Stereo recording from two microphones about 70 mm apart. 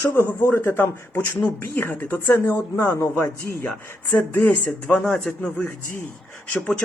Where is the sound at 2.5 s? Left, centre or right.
Left.